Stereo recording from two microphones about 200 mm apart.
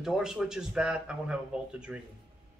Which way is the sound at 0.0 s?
Centre (ahead or behind).